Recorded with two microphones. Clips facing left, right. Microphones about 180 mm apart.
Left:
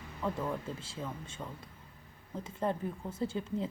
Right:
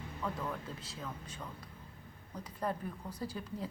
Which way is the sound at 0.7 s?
25° left (ahead or behind).